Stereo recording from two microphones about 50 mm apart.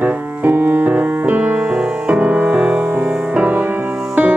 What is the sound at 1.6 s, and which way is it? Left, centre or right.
Music, centre.